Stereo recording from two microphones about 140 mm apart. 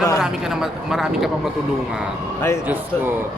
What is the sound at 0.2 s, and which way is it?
Speech, 5° right (ahead or behind).